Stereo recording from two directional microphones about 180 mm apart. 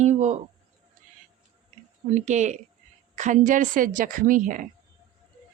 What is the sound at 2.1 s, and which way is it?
Speech, 40° right (ahead or behind).